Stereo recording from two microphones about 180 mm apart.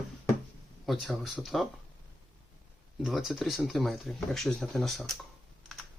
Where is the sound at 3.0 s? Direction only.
Centre (ahead or behind).